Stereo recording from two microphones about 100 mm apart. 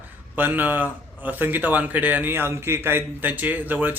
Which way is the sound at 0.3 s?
20° right (ahead or behind).